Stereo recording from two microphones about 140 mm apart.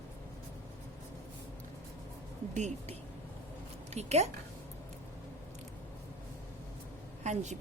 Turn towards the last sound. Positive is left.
turn(degrees=-55)  # may be behind; listen again after turning